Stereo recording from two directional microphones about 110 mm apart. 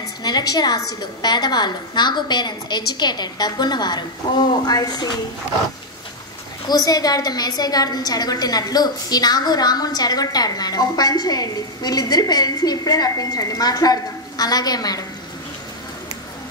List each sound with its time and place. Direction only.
0.2 s a woman's voice: 35° left (ahead or behind)
6.7 s a woman's voice: 35° left (ahead or behind)